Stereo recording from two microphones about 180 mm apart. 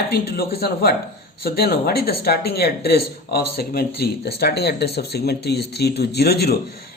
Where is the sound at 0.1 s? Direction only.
60° left (ahead or behind).